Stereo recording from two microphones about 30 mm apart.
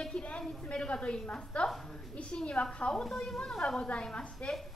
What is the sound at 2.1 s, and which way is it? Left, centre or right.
Speech, left.